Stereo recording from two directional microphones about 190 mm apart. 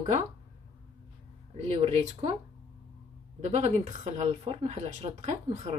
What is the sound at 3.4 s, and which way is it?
Speech, 35° right (ahead or behind).